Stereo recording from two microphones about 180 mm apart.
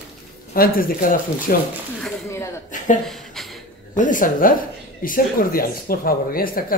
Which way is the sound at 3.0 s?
Centre (ahead or behind).